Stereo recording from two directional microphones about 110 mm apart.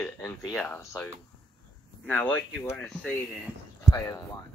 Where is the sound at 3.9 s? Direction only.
30° left (ahead or behind).